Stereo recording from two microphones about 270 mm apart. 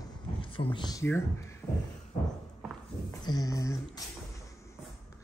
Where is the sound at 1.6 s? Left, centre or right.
Centre.